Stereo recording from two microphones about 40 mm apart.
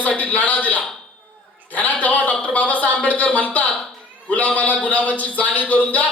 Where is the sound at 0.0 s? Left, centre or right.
Left.